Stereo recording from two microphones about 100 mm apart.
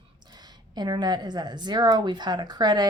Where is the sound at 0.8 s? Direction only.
45° right (ahead or behind).